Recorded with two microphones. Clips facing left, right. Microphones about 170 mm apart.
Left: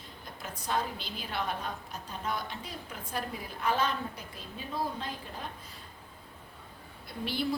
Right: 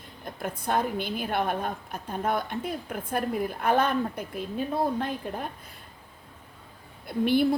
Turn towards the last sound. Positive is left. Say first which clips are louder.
# right 11 dB
turn(degrees=-55)  # may be behind; listen again after turning